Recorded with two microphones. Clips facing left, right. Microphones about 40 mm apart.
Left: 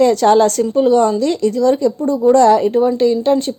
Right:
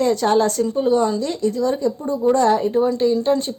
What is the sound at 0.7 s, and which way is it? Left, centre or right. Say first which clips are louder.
Speech: left 6 dB; left.